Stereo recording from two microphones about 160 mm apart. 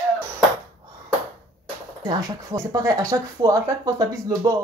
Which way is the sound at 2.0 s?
20° right (ahead or behind).